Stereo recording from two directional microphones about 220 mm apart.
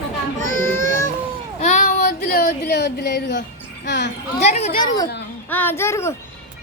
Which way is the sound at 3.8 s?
50° left (ahead or behind).